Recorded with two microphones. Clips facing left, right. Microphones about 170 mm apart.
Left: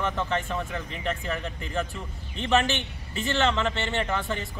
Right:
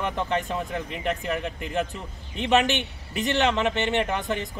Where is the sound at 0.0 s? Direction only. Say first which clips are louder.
Right 1 dB; 15° right (ahead or behind).